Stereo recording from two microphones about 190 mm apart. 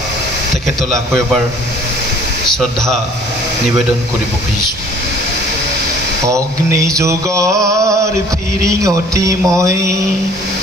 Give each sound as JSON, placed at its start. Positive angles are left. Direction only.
{"t": 6.2, "sound": "mantra", "side_deg": -15}